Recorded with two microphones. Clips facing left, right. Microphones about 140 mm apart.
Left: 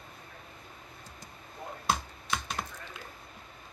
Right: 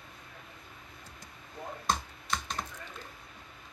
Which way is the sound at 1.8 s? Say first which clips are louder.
Left 1 dB; 5° left (ahead or behind).